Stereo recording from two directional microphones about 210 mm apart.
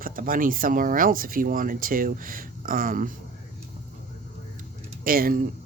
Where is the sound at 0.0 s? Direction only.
40° right (ahead or behind).